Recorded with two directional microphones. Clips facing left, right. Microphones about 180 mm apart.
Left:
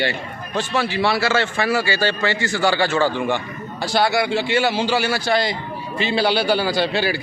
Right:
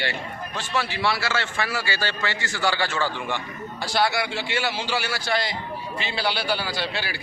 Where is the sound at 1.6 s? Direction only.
20° left (ahead or behind).